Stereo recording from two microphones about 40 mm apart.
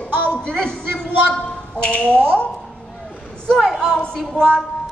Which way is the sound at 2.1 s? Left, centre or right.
Right.